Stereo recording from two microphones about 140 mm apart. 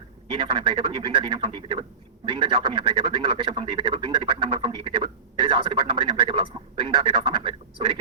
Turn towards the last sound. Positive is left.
turn(degrees=-35)  # may be behind; listen again after turning